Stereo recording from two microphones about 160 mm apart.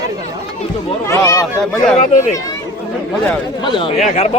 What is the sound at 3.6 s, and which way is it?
Speech, 30° left (ahead or behind).